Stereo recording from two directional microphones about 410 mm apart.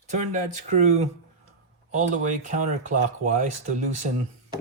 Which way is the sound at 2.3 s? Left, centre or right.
Centre.